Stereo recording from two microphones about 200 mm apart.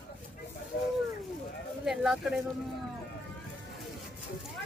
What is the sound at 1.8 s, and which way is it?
Speech, centre (ahead or behind).